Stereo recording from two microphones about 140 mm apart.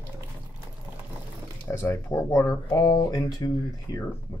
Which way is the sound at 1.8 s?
20° left (ahead or behind).